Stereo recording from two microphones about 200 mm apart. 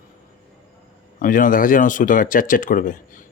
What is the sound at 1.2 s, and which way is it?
Speech, 45° left (ahead or behind).